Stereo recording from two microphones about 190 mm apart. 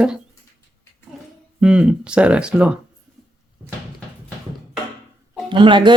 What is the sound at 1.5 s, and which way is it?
Speech, 5° right (ahead or behind).